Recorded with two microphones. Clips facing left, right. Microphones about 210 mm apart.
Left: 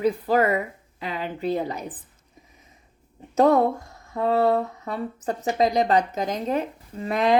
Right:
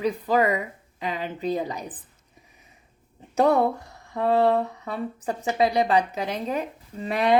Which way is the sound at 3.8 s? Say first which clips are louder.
Even; 35° right (ahead or behind).